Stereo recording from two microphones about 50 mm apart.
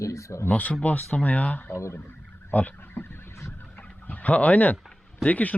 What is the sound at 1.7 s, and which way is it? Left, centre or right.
Speech, left.